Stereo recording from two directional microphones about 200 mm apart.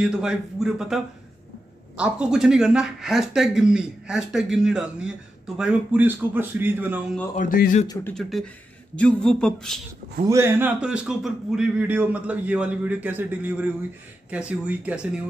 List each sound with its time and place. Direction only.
0.0 s a man's voice: 5° right (ahead or behind)
7.3 s speech: 45° left (ahead or behind)
8.1 s speech: centre (ahead or behind)
10.2 s a man's voice: 15° right (ahead or behind)